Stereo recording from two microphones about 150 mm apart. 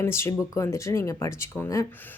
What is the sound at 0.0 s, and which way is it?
Speech, 15° left (ahead or behind).